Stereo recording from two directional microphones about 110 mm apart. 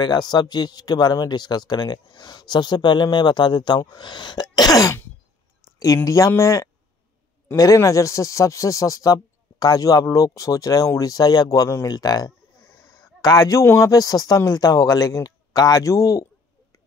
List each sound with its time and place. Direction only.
0.0 s speech: 40° left (ahead or behind)
6.0 s speech: 30° left (ahead or behind)